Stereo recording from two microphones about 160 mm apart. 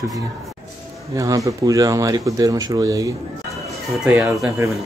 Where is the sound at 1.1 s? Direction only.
20° right (ahead or behind).